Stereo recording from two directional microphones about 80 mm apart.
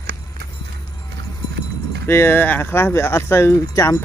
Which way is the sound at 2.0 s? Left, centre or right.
Left.